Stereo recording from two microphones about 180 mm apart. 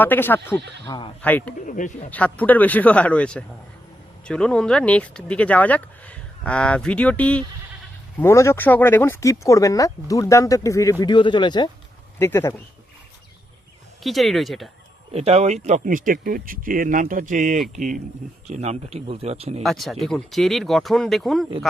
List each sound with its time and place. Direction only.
0.0 s speech: 10° left (ahead or behind)
1.5 s speech: 45° left (ahead or behind)
2.0 s speech: 10° left (ahead or behind); by 11.7 s 25° left (ahead or behind)
12.2 s speech: 15° left (ahead or behind)
14.0 s speech: centre (ahead or behind)
15.1 s speech: 35° right (ahead or behind)
19.6 s speech: centre (ahead or behind)